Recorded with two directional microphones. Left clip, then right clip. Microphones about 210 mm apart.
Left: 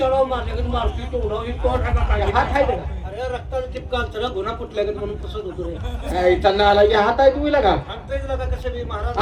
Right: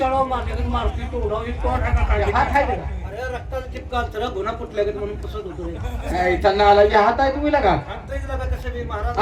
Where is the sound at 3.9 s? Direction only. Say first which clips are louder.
Even; 50° left (ahead or behind).